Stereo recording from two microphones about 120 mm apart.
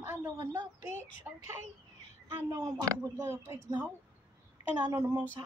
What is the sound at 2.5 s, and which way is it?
Speech, 30° right (ahead or behind).